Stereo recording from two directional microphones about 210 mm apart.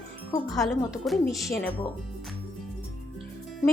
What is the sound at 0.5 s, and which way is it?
Speech, centre (ahead or behind).